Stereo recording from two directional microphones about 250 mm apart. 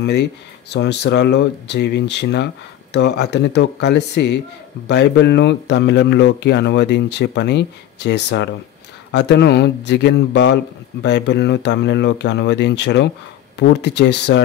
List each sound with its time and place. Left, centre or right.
0.0 s speech: left